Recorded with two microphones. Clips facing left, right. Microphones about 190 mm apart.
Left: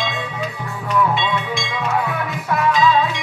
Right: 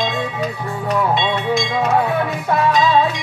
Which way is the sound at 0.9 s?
35° right (ahead or behind).